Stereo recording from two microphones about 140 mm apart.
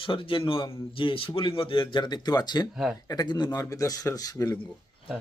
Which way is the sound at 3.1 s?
30° left (ahead or behind).